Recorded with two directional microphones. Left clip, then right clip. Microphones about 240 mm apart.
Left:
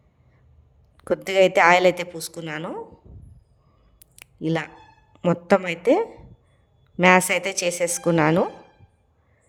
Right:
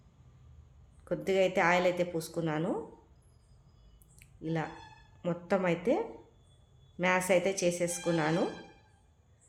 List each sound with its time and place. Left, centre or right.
1.0 s a woman's voice: left
4.2 s a sound: left
5.2 s a woman's voice: left